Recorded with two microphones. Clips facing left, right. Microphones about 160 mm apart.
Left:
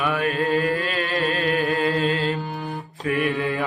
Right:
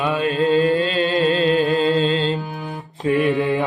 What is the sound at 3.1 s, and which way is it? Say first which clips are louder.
Mantra: right 5 dB; 25° right (ahead or behind).